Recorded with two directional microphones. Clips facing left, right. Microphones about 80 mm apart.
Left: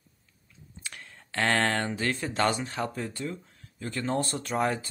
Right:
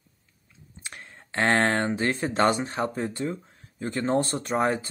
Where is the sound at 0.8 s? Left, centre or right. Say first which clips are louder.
Right 2 dB; right.